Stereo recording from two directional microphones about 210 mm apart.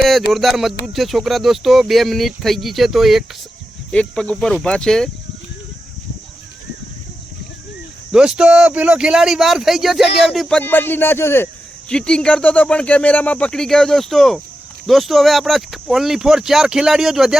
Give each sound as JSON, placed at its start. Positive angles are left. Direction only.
{"t": 0.3, "sound": "speech", "side_deg": 0}
{"t": 8.1, "sound": "speech", "side_deg": -5}
{"t": 10.1, "sound": "speech", "side_deg": 50}
{"t": 10.3, "sound": "speech", "side_deg": 0}